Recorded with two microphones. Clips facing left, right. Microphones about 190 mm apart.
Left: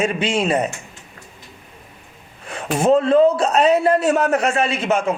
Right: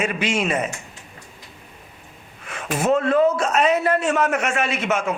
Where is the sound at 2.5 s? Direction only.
30° left (ahead or behind).